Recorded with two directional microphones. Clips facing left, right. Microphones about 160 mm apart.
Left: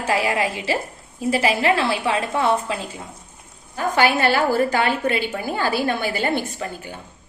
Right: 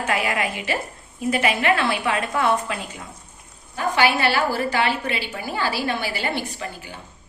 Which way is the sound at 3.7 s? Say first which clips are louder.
Left 1 dB; 45° left (ahead or behind).